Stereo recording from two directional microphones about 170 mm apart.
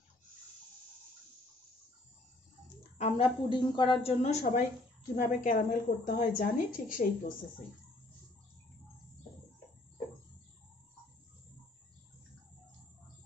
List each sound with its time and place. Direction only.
3.0 s a woman's voice: 35° left (ahead or behind); by 7.3 s 55° left (ahead or behind)